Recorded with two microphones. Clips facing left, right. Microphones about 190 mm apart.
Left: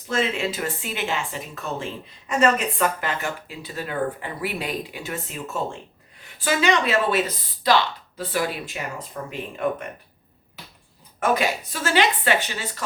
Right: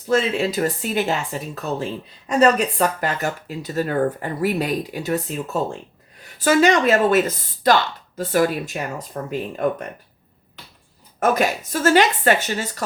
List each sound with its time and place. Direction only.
0.1 s speech: 40° right (ahead or behind)
11.2 s speech: 45° right (ahead or behind)